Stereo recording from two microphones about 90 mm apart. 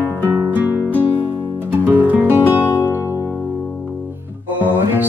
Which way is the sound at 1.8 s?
20° right (ahead or behind).